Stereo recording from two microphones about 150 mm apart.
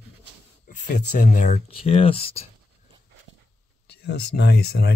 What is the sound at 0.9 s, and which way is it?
Speech, 55° left (ahead or behind).